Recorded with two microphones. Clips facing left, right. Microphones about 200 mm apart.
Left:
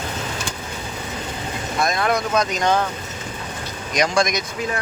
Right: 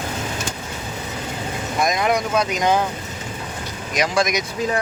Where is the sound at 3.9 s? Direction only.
5° right (ahead or behind).